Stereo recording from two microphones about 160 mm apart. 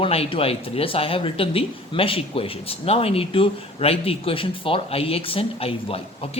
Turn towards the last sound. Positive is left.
turn(degrees=35)  # may be behind; listen again after turning